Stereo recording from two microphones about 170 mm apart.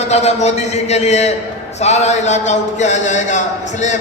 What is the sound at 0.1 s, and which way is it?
A man's voice, 40° left (ahead or behind).